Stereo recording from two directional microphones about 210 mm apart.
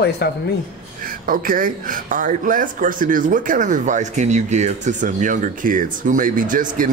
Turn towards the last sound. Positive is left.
turn(degrees=-40)  # may be behind; listen again after turning